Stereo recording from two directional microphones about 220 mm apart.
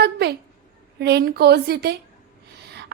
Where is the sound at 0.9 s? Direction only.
50° right (ahead or behind).